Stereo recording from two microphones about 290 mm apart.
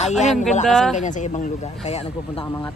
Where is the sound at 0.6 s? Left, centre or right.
Centre.